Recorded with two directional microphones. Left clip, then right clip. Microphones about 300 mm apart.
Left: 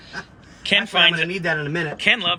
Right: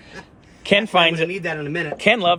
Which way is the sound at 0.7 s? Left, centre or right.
Centre.